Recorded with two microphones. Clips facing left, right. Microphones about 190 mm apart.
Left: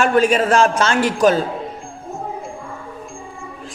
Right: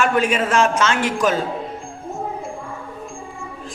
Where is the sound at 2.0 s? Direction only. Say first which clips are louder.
Right 1 dB; centre (ahead or behind).